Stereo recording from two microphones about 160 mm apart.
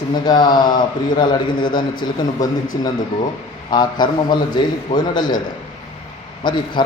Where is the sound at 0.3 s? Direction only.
25° left (ahead or behind).